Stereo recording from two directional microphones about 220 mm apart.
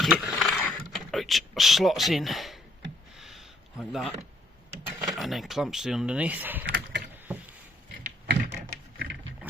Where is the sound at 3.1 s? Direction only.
Centre (ahead or behind).